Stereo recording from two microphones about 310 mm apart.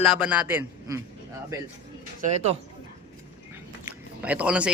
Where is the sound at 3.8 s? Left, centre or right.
Centre.